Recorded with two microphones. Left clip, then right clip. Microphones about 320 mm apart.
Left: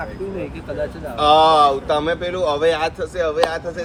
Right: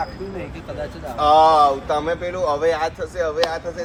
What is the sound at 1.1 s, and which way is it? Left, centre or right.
Speech, left.